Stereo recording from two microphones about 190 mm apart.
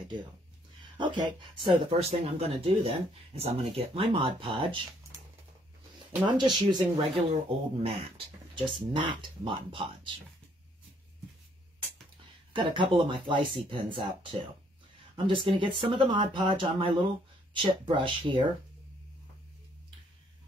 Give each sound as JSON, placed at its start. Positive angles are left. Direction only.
{"t": 0.9, "sound": "speech", "side_deg": -25}
{"t": 6.2, "sound": "speech", "side_deg": -25}
{"t": 12.5, "sound": "speech", "side_deg": -25}
{"t": 15.2, "sound": "speech", "side_deg": -25}